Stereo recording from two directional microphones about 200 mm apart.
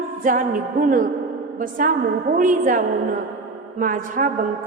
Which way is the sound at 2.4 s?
40° right (ahead or behind).